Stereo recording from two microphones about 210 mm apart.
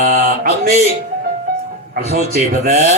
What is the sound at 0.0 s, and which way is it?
Mantra, 45° right (ahead or behind).